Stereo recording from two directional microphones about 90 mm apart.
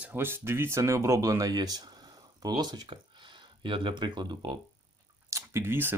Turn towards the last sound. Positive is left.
turn(degrees=-25)  # may be behind; listen again after turning